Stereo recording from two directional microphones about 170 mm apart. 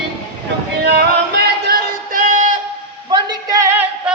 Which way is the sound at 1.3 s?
70° right (ahead or behind).